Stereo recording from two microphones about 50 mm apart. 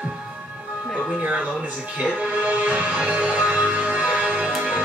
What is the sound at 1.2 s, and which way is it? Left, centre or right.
A woman's voice, right.